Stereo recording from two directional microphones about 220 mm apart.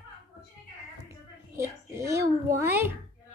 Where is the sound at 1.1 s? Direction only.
10° right (ahead or behind).